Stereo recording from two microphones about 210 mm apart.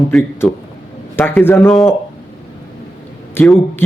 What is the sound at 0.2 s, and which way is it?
A man's voice, 10° left (ahead or behind).